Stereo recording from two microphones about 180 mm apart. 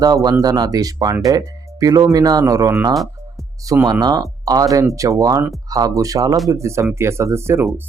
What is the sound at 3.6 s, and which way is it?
Speech, 20° right (ahead or behind).